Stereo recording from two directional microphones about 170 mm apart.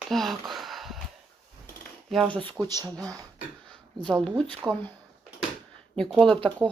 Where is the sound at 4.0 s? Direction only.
5° left (ahead or behind).